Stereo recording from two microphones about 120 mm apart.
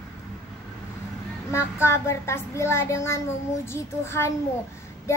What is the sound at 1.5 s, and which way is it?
A child's voice, 20° left (ahead or behind).